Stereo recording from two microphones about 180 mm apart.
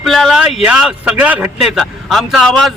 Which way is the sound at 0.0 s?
Centre (ahead or behind).